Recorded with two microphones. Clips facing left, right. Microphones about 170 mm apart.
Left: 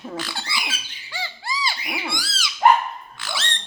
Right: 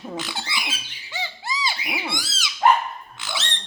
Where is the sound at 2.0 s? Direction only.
20° right (ahead or behind).